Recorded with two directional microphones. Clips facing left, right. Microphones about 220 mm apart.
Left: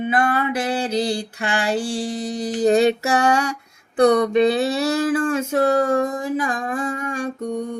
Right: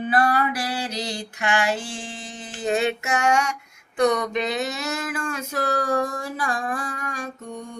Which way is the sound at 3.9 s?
35° left (ahead or behind).